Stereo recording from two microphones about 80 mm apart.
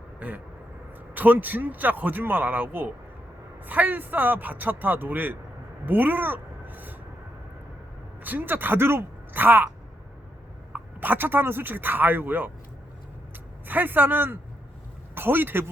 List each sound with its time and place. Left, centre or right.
0.2 s speech: right
5.8 s a sound: right
8.2 s speech: right
10.7 s speech: right
13.7 s speech: right